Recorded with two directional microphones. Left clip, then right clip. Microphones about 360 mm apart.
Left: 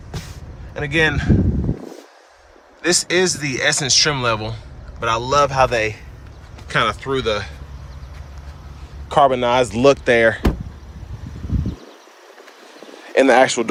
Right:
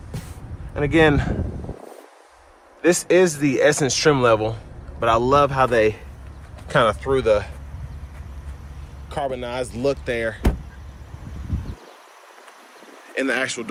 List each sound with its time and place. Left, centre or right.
0.8 s speech: centre
2.8 s speech: centre
9.0 s speech: centre
13.1 s speech: centre